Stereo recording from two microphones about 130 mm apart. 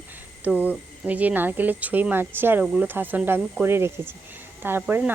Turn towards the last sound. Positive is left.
turn(degrees=-15)  # may be behind; listen again after turning